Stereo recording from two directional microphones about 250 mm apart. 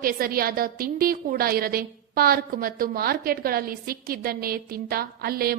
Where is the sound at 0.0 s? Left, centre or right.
Right.